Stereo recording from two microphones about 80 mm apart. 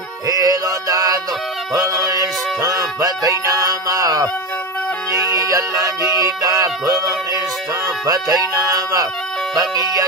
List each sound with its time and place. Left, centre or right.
0.3 s music: right
8.1 s speech: right
9.6 s music: right